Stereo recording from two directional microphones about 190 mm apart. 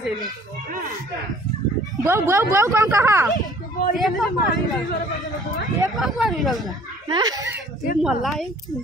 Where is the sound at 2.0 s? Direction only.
15° right (ahead or behind).